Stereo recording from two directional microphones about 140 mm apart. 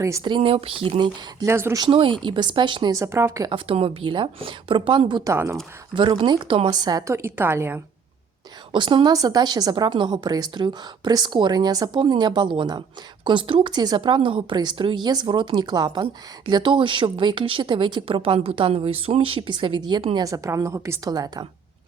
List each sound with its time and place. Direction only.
0.3 s a woman's voice: 40° right (ahead or behind)
1.5 s speech: 20° right (ahead or behind)
1.8 s a woman's voice: 35° right (ahead or behind)
2.9 s speech: 20° right (ahead or behind)
3.5 s a woman's voice: 45° right (ahead or behind)
5.3 s speech: 20° right (ahead or behind)
5.9 s speech: 35° right (ahead or behind); by 7.8 s 15° right (ahead or behind)
8.7 s a woman's voice: 35° right (ahead or behind)
20.2 s speech: 25° right (ahead or behind)